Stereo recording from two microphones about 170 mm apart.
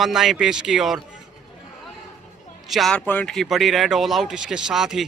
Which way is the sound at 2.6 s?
Centre (ahead or behind).